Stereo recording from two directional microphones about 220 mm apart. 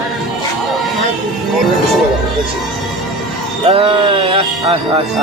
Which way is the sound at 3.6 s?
25° right (ahead or behind).